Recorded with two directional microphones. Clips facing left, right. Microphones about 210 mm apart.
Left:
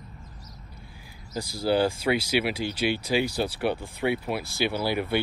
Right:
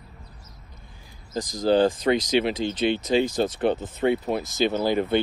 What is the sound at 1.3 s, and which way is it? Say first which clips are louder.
Speech: right 4 dB; 10° left (ahead or behind).